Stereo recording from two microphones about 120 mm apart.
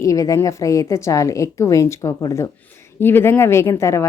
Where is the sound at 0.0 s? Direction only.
30° left (ahead or behind).